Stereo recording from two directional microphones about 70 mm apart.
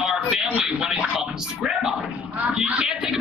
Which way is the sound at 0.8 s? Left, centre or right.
Centre.